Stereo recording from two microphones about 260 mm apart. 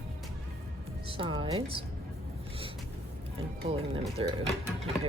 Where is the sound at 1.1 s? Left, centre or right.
Centre.